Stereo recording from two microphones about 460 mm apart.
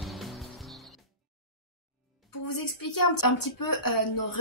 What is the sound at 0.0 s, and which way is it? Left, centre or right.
Music, centre.